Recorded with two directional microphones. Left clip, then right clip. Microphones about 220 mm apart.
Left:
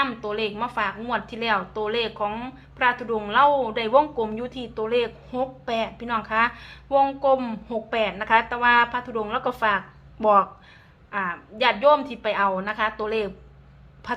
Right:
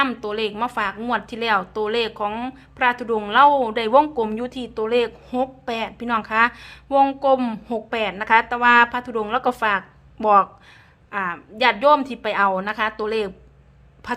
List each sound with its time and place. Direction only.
0.0 s speech: 25° right (ahead or behind)